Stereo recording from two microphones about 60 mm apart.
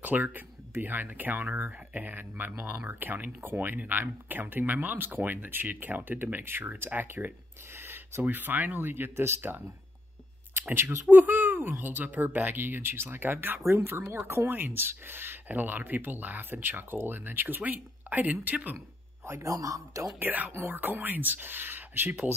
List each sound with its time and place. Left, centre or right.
0.0 s speech: right
7.7 s a sound: right
8.2 s speech: right
10.5 s speech: right
19.4 s a man's voice: right
20.2 s speech: right